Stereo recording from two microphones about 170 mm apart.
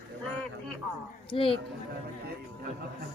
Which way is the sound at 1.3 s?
30° left (ahead or behind).